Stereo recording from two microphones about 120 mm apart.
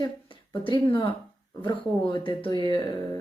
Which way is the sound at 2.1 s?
45° left (ahead or behind).